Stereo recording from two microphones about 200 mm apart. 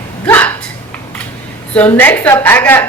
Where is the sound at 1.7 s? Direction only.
10° left (ahead or behind).